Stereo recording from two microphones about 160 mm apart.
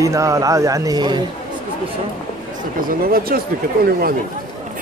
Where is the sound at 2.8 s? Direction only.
65° right (ahead or behind).